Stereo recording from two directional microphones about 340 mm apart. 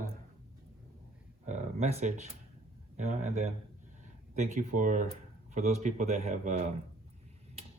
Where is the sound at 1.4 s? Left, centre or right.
Centre.